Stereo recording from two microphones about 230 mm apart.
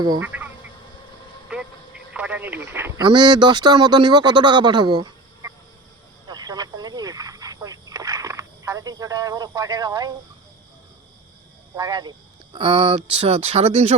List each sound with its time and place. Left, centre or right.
0.0 s speech: centre
2.1 s speech: centre
3.1 s speech: centre
6.2 s a sound: centre
11.8 s speech: centre